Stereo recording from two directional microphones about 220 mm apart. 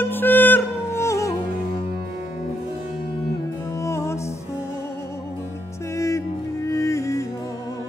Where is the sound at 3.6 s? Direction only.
15° left (ahead or behind).